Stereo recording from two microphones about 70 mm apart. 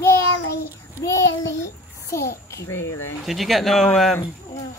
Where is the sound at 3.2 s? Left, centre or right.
Centre.